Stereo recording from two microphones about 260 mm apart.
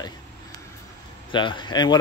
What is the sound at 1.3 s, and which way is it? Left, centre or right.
Speech, centre.